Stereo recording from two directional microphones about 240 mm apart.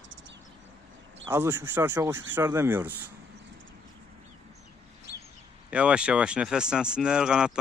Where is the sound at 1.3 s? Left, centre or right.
Centre.